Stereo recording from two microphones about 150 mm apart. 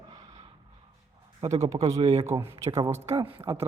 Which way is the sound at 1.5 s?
20° right (ahead or behind).